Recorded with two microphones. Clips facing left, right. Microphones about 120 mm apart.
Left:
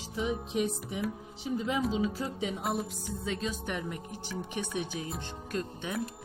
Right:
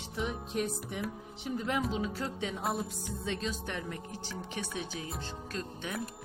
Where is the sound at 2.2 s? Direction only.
5° left (ahead or behind).